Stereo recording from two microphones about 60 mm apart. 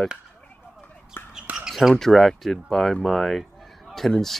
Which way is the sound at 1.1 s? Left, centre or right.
Left.